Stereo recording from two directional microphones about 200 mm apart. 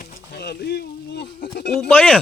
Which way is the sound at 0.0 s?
50° left (ahead or behind).